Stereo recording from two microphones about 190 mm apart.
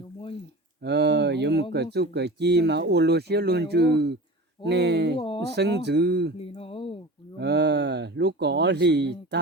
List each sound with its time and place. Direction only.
0.8 s speech: 60° right (ahead or behind)
6.4 s speech: 30° left (ahead or behind)
7.3 s speech: 65° right (ahead or behind)